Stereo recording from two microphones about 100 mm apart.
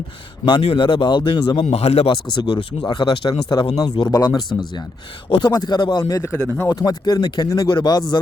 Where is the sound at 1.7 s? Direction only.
90° left.